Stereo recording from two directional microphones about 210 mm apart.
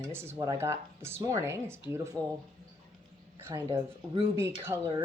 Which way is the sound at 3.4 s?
10° right (ahead or behind).